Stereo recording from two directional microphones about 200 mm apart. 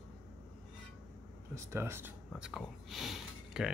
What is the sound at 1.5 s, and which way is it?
Speech, 10° right (ahead or behind).